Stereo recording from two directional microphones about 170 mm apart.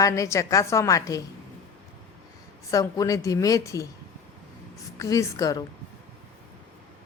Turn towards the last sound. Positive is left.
turn(degrees=20)  # may be behind; listen again after turning